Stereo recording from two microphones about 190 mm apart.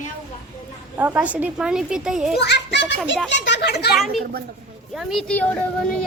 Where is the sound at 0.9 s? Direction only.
10° right (ahead or behind).